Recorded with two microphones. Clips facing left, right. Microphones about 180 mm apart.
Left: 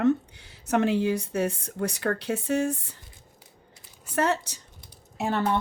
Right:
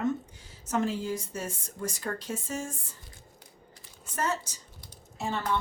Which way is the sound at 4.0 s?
70° left (ahead or behind).